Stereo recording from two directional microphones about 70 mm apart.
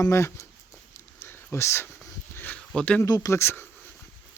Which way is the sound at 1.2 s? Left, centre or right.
Left.